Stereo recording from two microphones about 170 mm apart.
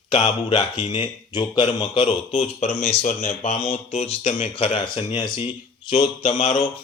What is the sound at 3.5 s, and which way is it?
A man's voice, 35° left (ahead or behind).